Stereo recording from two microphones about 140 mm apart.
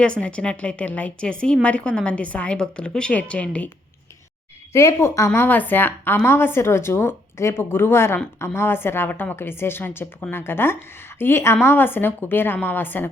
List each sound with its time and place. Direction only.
0.0 s a woman's voice: 10° left (ahead or behind)
4.7 s a woman's voice: 20° left (ahead or behind)